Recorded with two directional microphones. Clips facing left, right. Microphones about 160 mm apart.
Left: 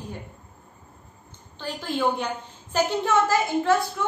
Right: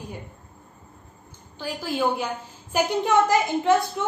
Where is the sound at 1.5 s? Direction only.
5° right (ahead or behind).